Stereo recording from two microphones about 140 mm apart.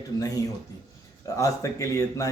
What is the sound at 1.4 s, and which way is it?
Speech, 25° left (ahead or behind).